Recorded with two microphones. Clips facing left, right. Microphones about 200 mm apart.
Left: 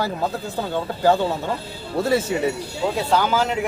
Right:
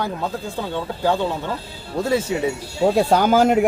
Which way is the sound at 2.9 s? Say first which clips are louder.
Right 4 dB; 45° right (ahead or behind).